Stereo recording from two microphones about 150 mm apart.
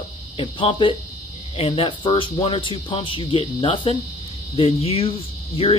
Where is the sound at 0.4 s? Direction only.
35° left (ahead or behind).